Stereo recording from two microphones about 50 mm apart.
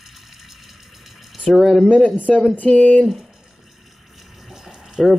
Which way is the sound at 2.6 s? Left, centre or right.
Centre.